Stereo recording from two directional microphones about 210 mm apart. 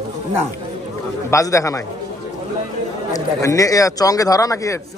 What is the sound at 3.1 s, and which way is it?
A man's voice, 15° left (ahead or behind).